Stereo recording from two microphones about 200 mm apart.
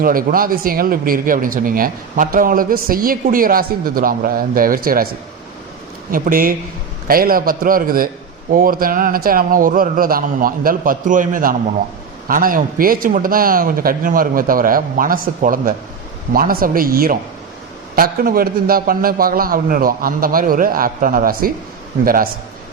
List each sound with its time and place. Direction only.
0.0 s a man's voice: 45° right (ahead or behind)
6.1 s a man's voice: 45° right (ahead or behind)